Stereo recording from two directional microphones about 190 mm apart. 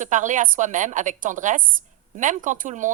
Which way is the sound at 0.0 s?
40° right (ahead or behind).